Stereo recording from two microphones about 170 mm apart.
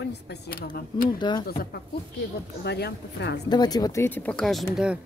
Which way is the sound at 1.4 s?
65° left (ahead or behind).